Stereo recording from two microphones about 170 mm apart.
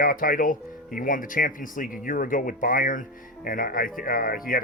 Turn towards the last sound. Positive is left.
turn(degrees=60)  # may be behind; listen again after turning